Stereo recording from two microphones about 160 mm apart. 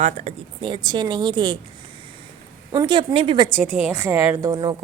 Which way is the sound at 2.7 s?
30° right (ahead or behind).